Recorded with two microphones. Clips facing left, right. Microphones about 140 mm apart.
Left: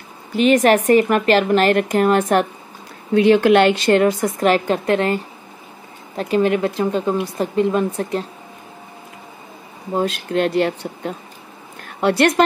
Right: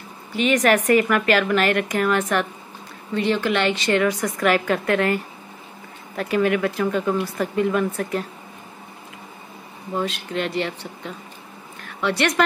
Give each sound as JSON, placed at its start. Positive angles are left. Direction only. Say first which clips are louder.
{"t": 0.4, "sound": "speech", "louder": "left 5 dB", "side_deg": 35}
{"t": 3.1, "sound": "speech", "louder": "left 9 dB", "side_deg": 55}
{"t": 4.1, "sound": "speech", "louder": "left 4 dB", "side_deg": 30}
{"t": 9.9, "sound": "speech", "louder": "left 6 dB", "side_deg": 45}